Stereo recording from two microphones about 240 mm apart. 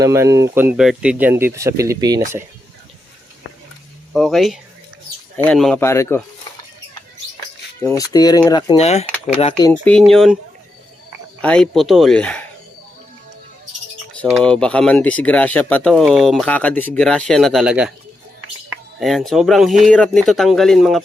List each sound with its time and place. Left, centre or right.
0.0 s speech: centre
4.1 s speech: centre
7.8 s speech: centre
9.8 s speech: centre
11.3 s speech: centre
14.3 s speech: centre
18.9 s speech: centre